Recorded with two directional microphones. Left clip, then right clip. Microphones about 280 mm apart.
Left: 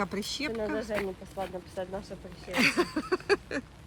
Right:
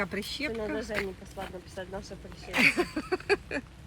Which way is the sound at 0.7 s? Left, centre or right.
Left.